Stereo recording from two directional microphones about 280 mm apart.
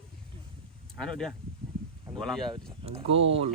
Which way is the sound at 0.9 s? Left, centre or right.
Centre.